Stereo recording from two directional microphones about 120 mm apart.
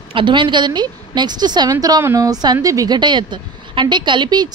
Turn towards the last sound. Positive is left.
turn(degrees=-40)  # may be behind; listen again after turning